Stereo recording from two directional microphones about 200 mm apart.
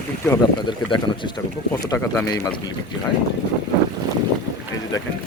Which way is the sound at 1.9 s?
10° left (ahead or behind).